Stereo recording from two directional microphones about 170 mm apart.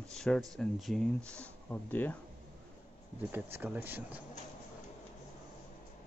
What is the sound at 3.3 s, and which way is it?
Speech, 10° right (ahead or behind).